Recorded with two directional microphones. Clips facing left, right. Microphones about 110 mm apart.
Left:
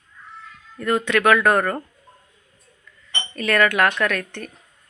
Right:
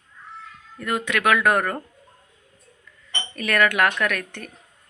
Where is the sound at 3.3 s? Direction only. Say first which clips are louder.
Left 2 dB; 10° right (ahead or behind).